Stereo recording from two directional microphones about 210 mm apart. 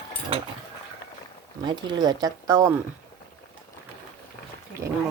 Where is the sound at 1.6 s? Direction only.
20° right (ahead or behind).